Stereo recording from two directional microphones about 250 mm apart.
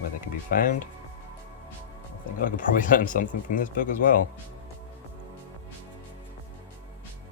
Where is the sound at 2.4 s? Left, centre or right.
Left.